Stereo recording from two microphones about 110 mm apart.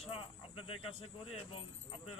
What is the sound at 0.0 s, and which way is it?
Speech, 65° left (ahead or behind).